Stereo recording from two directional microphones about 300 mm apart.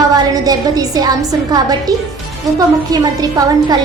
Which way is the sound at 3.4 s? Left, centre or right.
Centre.